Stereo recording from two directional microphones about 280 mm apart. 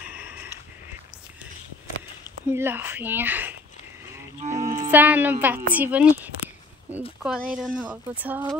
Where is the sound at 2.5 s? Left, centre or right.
Centre.